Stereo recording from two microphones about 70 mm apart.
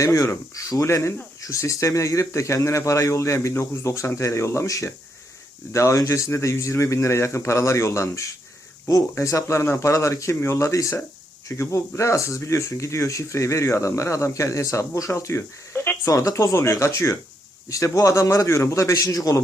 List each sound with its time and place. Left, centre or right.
0.0 s speech: left
16.0 s speech: left